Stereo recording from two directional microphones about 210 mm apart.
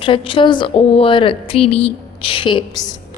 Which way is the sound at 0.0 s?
25° left (ahead or behind).